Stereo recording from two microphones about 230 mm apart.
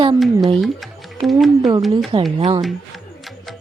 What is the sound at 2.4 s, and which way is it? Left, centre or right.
Music, right.